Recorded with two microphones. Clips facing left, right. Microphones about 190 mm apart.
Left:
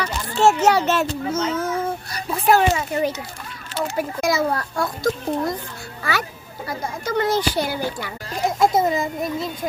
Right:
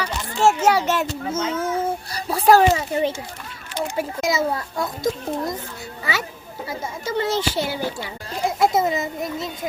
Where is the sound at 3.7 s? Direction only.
15° right (ahead or behind).